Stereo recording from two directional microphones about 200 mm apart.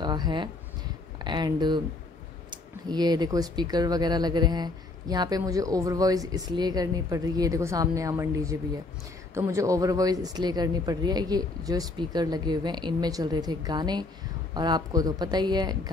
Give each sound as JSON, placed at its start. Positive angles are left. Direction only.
{"t": 0.0, "sound": "speech", "side_deg": -20}